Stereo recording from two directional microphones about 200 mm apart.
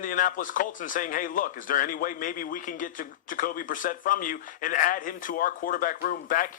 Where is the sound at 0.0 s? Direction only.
40° left (ahead or behind).